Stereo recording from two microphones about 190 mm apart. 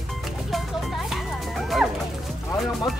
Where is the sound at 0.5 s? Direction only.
Centre (ahead or behind).